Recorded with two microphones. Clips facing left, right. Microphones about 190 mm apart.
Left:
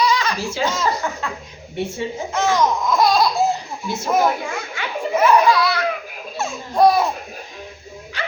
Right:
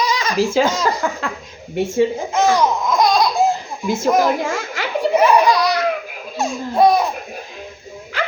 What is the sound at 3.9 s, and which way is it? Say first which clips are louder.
A child's voice: right 3 dB; 90° right.